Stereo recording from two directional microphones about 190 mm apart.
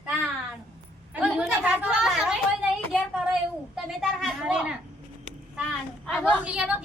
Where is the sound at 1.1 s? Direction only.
5° right (ahead or behind).